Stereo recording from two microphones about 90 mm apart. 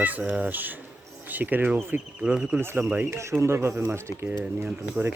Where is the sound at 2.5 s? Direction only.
25° right (ahead or behind).